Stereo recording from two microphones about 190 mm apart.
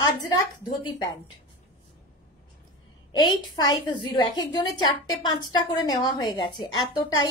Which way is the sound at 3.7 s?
25° left (ahead or behind).